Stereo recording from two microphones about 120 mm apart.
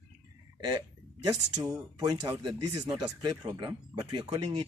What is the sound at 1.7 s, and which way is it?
Speech, 30° right (ahead or behind).